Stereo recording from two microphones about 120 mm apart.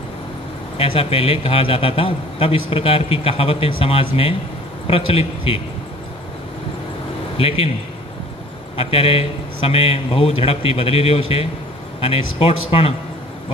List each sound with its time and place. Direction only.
0.7 s a man's voice: 50° left (ahead or behind)
7.3 s a man's voice: 55° left (ahead or behind)
8.7 s a man's voice: 55° left (ahead or behind)